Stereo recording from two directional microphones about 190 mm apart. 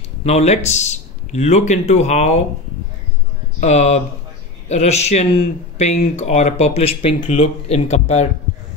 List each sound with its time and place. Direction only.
0.2 s speech: 35° left (ahead or behind)
3.6 s speech: 35° left (ahead or behind)